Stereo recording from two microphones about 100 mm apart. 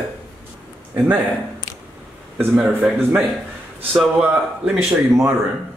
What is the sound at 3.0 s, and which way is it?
Speech, 25° right (ahead or behind).